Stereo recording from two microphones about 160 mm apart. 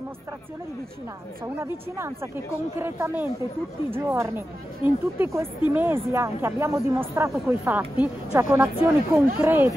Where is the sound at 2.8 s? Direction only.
15° right (ahead or behind).